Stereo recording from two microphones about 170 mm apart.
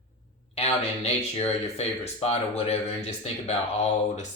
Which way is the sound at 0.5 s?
40° left (ahead or behind).